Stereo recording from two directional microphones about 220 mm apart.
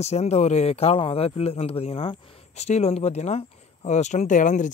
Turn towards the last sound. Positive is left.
turn(degrees=35)  # may be behind; listen again after turning